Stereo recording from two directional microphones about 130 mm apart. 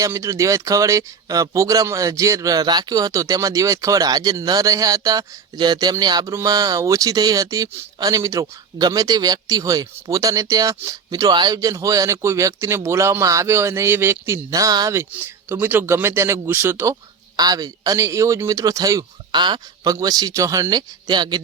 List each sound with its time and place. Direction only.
0.0 s speech: 25° right (ahead or behind)
15.1 s speech: 15° right (ahead or behind); by 21.4 s 30° right (ahead or behind)